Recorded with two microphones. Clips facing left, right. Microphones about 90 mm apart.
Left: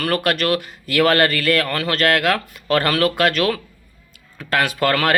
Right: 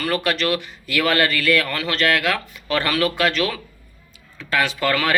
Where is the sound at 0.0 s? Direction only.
55° left (ahead or behind).